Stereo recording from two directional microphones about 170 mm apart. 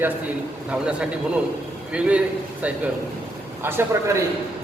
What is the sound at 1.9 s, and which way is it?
Speech, 5° right (ahead or behind).